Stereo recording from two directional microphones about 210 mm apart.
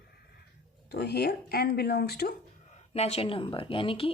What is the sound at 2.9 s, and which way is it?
Speech, 30° left (ahead or behind).